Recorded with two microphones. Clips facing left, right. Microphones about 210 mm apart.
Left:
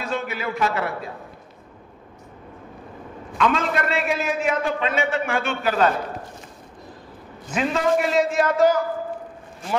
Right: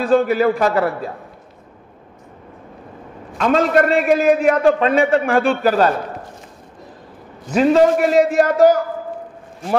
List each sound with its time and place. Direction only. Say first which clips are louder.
0.0 s a man's voice: right 13 dB; 35° right (ahead or behind)
3.3 s a man's voice: right 7 dB; 45° right (ahead or behind)
4.9 s a man's voice: right 8 dB; 40° right (ahead or behind)
7.5 s a man's voice: right 8 dB; 40° right (ahead or behind)